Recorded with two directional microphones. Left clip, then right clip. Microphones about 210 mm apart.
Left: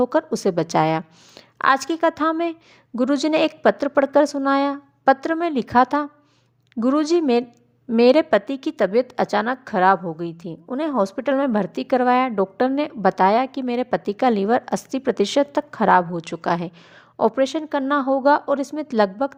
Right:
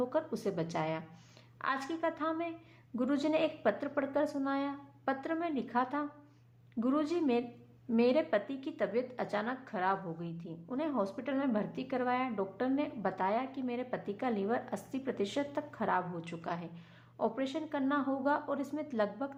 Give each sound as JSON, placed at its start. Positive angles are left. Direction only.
{"t": 0.0, "sound": "a woman's voice", "side_deg": 45}